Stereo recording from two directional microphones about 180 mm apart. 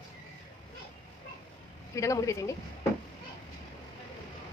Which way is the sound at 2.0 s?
15° left (ahead or behind).